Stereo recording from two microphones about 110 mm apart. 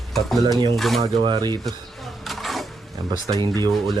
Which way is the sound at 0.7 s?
Centre (ahead or behind).